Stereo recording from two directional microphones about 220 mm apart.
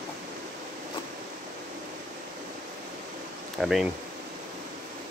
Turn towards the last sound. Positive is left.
turn(degrees=0)  # may be behind; listen again after turning